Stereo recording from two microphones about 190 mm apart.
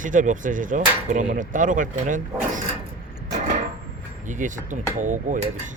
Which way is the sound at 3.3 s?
45° right (ahead or behind).